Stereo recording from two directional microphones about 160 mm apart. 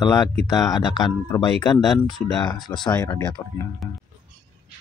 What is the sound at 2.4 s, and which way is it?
Speech, 25° left (ahead or behind).